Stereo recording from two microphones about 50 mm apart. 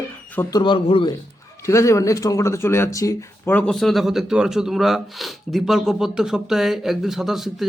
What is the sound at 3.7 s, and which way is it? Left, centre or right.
Speech, centre.